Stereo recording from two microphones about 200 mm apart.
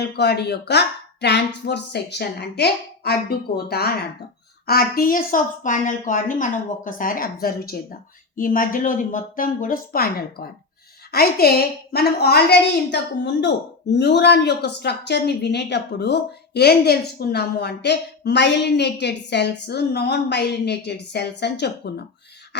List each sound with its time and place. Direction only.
0.0 s a woman's voice: 55° left (ahead or behind)